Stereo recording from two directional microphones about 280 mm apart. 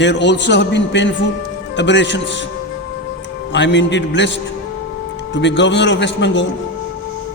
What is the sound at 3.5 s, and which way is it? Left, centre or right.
A man's voice, left.